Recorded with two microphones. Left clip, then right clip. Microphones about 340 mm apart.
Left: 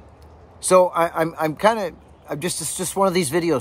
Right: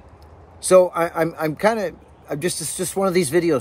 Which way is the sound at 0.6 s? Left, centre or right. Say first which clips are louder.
Right 1 dB; centre.